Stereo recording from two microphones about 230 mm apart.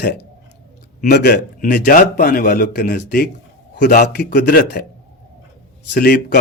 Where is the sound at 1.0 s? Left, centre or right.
Left.